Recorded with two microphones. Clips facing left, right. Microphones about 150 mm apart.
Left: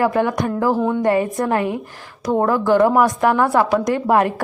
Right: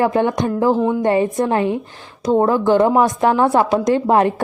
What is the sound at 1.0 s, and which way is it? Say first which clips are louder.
A woman's voice: right 1 dB; 25° right (ahead or behind).